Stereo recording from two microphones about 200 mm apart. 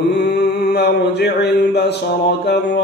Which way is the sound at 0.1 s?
55° left (ahead or behind).